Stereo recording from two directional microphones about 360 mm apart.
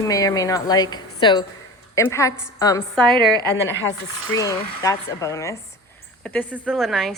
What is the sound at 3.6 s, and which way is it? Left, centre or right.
Speech, left.